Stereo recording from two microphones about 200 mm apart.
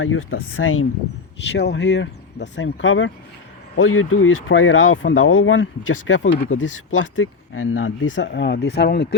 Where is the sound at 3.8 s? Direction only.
90° left.